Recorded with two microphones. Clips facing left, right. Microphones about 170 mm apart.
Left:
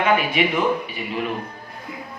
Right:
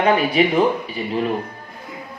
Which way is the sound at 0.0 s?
35° right (ahead or behind).